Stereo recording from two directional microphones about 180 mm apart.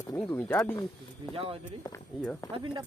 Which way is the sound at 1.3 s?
30° right (ahead or behind).